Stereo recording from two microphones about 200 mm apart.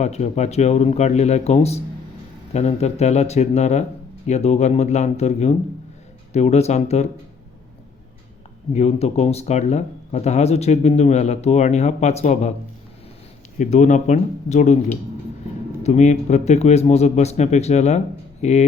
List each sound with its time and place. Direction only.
0.0 s speech: 35° left (ahead or behind)
8.7 s speech: 30° left (ahead or behind)
13.6 s speech: 35° left (ahead or behind)